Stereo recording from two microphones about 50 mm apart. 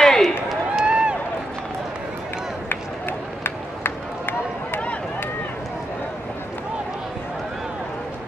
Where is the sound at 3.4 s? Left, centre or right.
Left.